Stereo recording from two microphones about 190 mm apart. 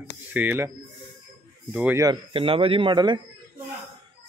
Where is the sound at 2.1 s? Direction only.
25° right (ahead or behind).